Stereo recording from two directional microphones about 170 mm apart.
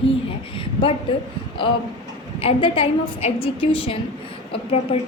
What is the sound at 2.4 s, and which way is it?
A woman's voice, 30° left (ahead or behind).